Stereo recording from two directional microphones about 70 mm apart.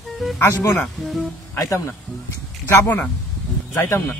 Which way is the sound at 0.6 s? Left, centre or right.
Left.